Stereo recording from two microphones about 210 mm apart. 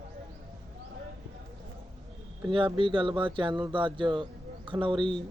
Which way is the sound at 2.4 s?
25° right (ahead or behind).